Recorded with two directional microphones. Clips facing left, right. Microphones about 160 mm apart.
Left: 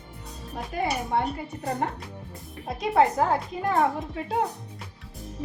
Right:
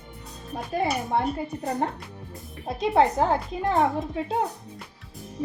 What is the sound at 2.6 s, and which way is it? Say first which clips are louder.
A woman's voice: right 1 dB; 25° right (ahead or behind).